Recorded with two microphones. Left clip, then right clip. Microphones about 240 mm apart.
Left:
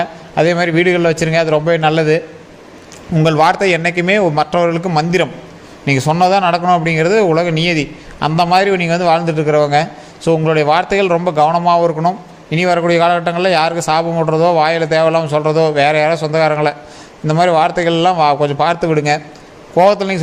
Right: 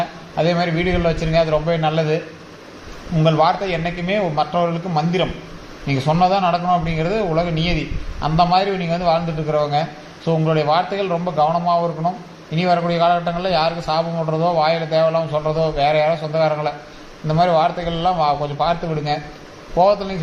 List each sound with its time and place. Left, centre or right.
0.3 s a man's voice: left